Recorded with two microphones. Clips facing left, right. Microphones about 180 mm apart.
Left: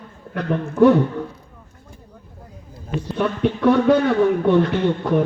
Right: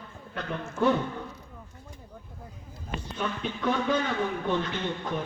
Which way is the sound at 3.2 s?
70° left (ahead or behind).